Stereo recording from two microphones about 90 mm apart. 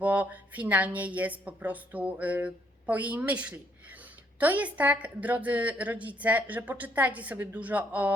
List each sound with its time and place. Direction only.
0.0 s a woman's voice: 15° right (ahead or behind)